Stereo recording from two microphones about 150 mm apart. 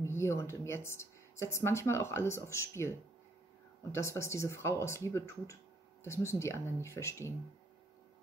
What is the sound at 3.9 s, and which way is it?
Speech, 20° left (ahead or behind).